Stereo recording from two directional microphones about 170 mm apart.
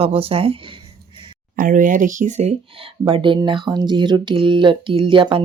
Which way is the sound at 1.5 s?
55° right (ahead or behind).